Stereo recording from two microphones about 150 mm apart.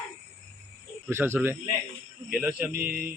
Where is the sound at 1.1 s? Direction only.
15° right (ahead or behind).